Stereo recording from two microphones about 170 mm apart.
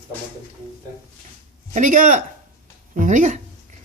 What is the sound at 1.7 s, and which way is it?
A man's voice, 50° right (ahead or behind).